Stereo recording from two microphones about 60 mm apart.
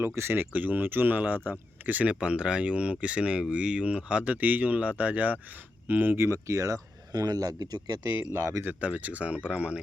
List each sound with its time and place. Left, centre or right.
0.0 s speech: right
2.1 s speech: centre; by 6.7 s right
7.1 s speech: right
8.3 s speech: right
8.6 s speech: right